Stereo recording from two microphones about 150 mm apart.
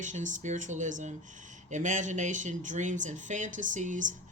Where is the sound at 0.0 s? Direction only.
55° right (ahead or behind).